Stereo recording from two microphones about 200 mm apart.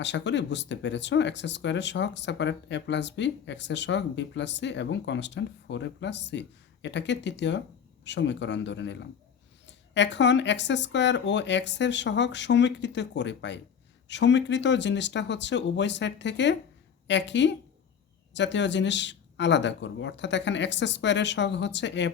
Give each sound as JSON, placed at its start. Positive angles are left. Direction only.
{"t": 0.0, "sound": "speech", "side_deg": 60}